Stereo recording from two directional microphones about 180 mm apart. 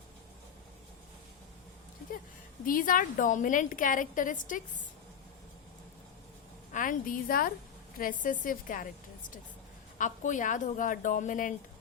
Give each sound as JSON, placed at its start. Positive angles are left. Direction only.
{"t": 2.6, "sound": "a woman's voice", "side_deg": 50}
{"t": 6.7, "sound": "a woman's voice", "side_deg": 50}
{"t": 10.0, "sound": "a woman's voice", "side_deg": 45}